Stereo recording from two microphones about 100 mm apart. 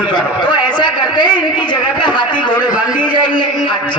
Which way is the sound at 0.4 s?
50° left (ahead or behind).